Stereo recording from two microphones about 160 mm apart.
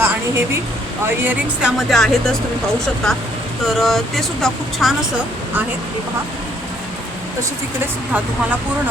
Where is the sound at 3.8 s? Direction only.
Centre (ahead or behind).